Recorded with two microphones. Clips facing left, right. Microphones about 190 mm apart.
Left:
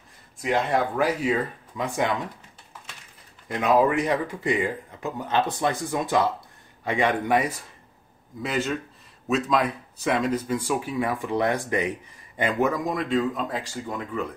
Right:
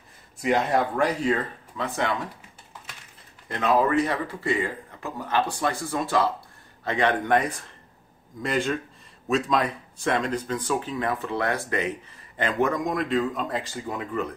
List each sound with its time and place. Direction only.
0.4 s speech: centre (ahead or behind)
3.4 s speech: 10° left (ahead or behind)